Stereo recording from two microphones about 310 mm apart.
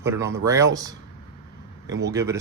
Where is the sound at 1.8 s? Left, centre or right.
Right.